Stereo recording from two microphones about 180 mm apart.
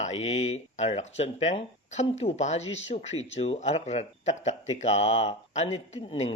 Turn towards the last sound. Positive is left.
turn(degrees=35)  # may be behind; listen again after turning